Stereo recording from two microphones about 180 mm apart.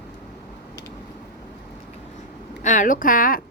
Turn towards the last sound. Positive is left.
turn(degrees=50)  # may be behind; listen again after turning